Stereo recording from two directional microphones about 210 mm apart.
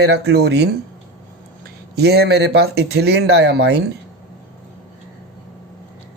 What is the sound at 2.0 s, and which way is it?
Speech, 50° right (ahead or behind).